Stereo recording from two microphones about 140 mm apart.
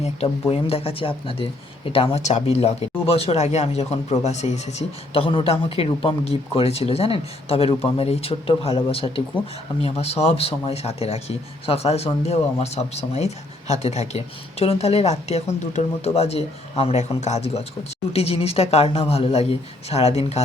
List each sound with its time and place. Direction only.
0.0 s speech: 45° left (ahead or behind)